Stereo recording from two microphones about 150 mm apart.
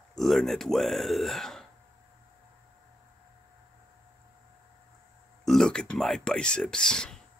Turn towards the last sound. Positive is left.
turn(degrees=5)  # may be behind; listen again after turning